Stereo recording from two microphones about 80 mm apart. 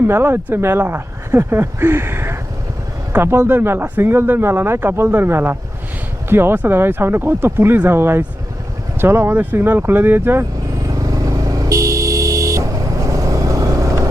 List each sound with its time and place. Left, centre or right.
0.1 s speech: right
10.8 s vehicle: right